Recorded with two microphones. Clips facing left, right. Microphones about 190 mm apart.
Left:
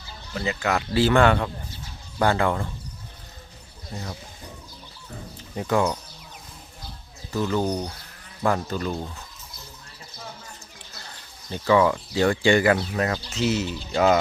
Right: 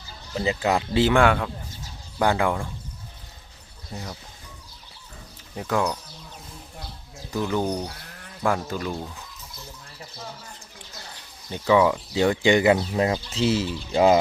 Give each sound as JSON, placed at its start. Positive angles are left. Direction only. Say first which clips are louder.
{"t": 0.3, "sound": "speech", "louder": "right 2 dB", "side_deg": -25}
{"t": 1.2, "sound": "speech", "louder": "left 1 dB", "side_deg": -5}
{"t": 5.5, "sound": "speech", "louder": "left 2 dB", "side_deg": 0}
{"t": 7.3, "sound": "speech", "louder": "left 1 dB", "side_deg": -15}
{"t": 11.5, "sound": "speech", "louder": "even", "side_deg": -10}